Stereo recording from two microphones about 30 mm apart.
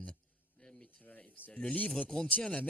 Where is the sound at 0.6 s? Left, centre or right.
Left.